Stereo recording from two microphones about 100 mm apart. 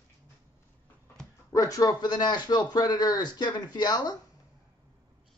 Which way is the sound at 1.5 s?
35° left (ahead or behind).